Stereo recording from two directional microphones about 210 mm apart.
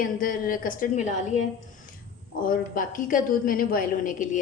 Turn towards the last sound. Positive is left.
turn(degrees=35)  # may be behind; listen again after turning